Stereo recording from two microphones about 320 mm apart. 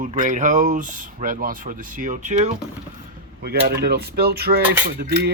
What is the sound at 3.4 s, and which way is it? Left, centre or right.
Speech, right.